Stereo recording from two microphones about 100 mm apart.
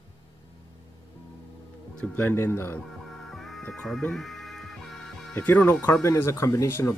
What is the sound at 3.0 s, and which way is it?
Music, centre (ahead or behind).